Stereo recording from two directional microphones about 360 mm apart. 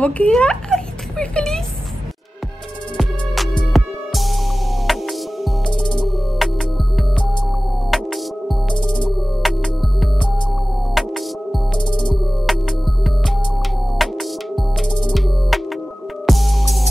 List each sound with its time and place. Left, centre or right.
0.0 s speech: centre
3.7 s music: centre
7.9 s music: centre
8.8 s music: centre
9.4 s music: centre
12.4 s music: centre